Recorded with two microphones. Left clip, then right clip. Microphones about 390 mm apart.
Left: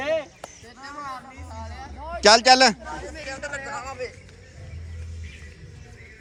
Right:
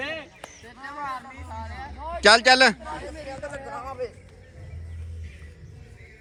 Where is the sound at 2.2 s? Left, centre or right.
Centre.